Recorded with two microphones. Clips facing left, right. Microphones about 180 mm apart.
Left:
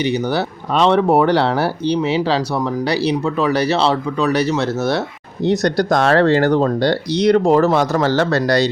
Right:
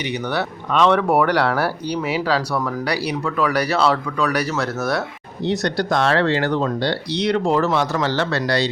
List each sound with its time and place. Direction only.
0.0 s speech: 30° left (ahead or behind)
5.4 s speech: 45° left (ahead or behind)